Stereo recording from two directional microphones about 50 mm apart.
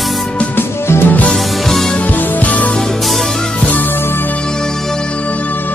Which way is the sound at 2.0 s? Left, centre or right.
Left.